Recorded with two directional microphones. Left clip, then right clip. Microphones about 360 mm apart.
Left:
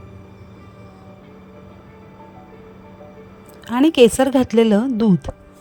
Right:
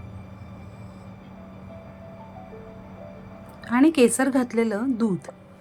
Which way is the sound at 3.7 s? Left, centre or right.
Left.